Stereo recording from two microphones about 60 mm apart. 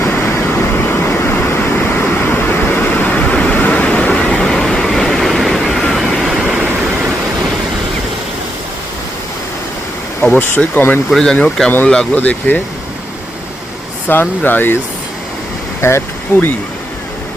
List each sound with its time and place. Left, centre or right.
0.1 s vehicle: left; by 6.5 s centre
10.6 s speech: left
11.1 s speech: centre
12.1 s speech: left
14.1 s speech: left
15.8 s speech: left